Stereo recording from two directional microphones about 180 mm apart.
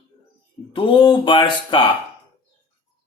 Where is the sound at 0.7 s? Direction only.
30° left (ahead or behind).